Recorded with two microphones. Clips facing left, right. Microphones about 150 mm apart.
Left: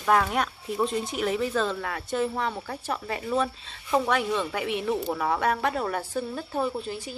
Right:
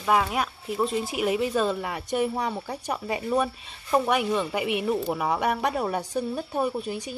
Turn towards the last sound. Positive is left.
turn(degrees=-15)  # may be behind; listen again after turning